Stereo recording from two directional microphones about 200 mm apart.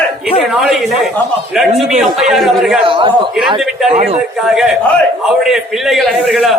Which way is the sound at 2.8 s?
25° right (ahead or behind).